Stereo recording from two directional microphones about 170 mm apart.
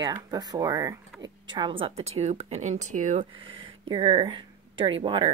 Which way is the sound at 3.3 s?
30° right (ahead or behind).